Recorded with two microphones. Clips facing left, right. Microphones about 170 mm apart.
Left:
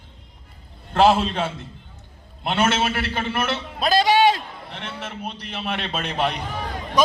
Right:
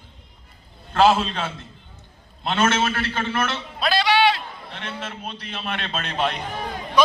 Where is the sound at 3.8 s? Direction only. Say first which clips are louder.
Left 2 dB; 45° left (ahead or behind).